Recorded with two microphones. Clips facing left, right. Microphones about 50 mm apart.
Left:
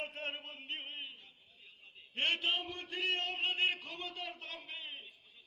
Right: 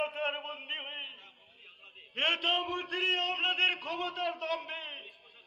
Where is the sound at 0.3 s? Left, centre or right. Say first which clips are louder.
Right 6 dB; right.